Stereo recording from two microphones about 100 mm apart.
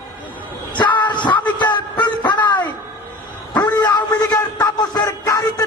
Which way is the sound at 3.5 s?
45° left (ahead or behind).